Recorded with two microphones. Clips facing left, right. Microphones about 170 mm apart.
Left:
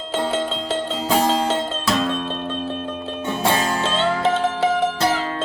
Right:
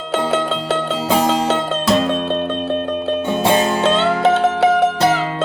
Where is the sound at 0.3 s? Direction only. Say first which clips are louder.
Right 4 dB; 70° right (ahead or behind).